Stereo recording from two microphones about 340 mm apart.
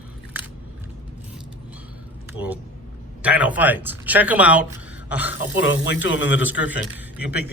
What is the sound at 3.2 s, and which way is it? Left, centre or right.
Speech, centre.